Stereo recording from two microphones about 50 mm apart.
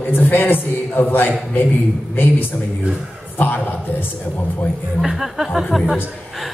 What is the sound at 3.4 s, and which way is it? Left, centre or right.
Speech, left.